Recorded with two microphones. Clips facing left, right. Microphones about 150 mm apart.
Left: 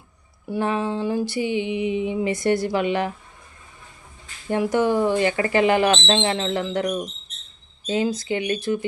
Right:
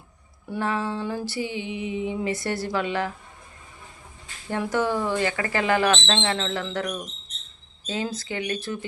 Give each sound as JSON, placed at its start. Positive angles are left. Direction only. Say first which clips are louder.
{"t": 0.5, "sound": "music", "louder": "left 3 dB", "side_deg": 20}
{"t": 4.5, "sound": "music", "louder": "left 5 dB", "side_deg": 15}
{"t": 7.9, "sound": "speech", "louder": "left 7 dB", "side_deg": 15}